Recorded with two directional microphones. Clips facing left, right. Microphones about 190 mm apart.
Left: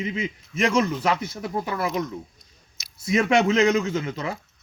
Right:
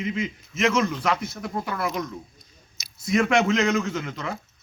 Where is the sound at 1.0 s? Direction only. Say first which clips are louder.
Left 1 dB; 25° left (ahead or behind).